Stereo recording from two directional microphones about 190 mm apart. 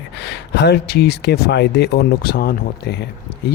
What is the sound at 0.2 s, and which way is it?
Speech, 60° left (ahead or behind).